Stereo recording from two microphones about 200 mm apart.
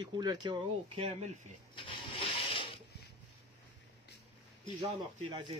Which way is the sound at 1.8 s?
25° left (ahead or behind).